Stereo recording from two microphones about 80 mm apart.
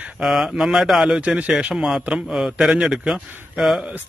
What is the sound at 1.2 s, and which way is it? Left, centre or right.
A man's voice, centre.